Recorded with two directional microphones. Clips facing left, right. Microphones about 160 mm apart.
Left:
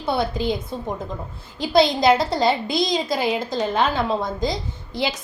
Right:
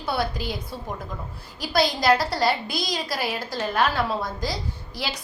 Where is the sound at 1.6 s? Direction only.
25° left (ahead or behind).